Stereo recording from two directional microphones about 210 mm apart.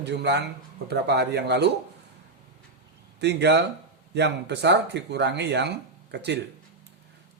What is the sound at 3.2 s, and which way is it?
Speech, 55° right (ahead or behind).